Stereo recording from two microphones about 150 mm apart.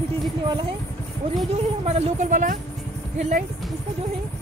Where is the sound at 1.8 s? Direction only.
50° right (ahead or behind).